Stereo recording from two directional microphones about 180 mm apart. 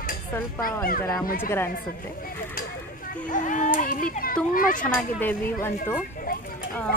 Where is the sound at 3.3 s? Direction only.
45° left (ahead or behind).